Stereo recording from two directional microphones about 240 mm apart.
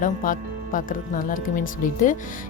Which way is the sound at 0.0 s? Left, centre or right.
Left.